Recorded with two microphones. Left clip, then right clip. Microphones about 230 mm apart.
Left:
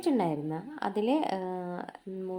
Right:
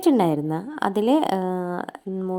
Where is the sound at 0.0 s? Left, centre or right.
Right.